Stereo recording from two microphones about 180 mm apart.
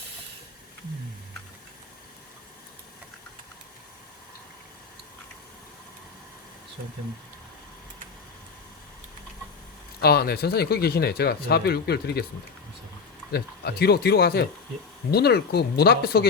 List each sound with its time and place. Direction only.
10.0 s speech: 60° left (ahead or behind)
13.3 s speech: 65° left (ahead or behind)